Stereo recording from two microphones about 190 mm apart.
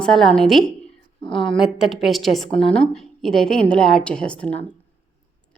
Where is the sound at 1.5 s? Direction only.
Centre (ahead or behind).